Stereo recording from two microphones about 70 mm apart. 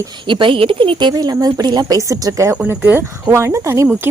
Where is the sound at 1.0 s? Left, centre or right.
Right.